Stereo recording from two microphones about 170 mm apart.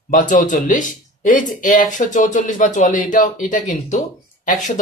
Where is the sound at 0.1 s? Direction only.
55° left (ahead or behind).